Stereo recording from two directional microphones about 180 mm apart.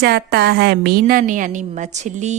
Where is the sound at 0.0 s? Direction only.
60° right (ahead or behind).